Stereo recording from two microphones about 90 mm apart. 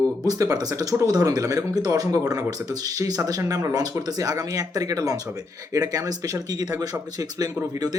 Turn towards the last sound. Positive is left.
turn(degrees=-45)  # may be behind; listen again after turning